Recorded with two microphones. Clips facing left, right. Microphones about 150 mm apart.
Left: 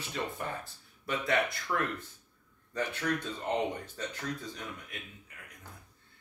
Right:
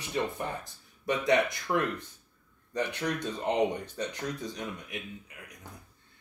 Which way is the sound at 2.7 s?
15° right (ahead or behind).